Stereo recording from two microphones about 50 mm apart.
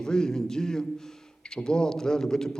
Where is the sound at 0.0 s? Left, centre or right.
Centre.